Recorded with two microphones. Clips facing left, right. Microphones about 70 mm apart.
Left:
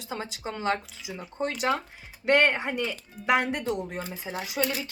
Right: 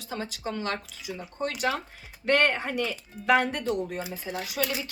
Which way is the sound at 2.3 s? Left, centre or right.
Centre.